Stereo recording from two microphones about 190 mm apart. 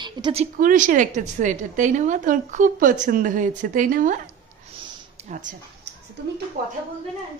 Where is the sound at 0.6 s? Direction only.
45° right (ahead or behind).